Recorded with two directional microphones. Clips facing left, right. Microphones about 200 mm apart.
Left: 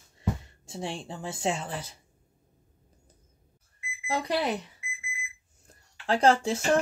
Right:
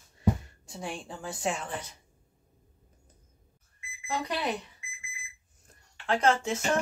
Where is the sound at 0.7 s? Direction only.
30° left (ahead or behind).